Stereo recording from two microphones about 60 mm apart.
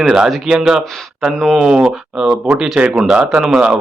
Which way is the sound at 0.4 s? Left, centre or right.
Centre.